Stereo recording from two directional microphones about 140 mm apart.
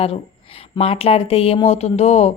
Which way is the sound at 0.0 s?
45° left (ahead or behind).